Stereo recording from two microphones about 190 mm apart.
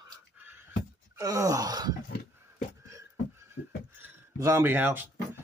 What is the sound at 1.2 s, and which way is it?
Wail, 15° right (ahead or behind).